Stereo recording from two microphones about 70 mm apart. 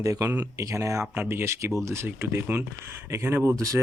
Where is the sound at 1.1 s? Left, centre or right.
Right.